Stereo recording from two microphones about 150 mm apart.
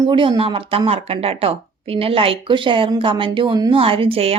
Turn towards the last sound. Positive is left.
turn(degrees=-40)  # may be behind; listen again after turning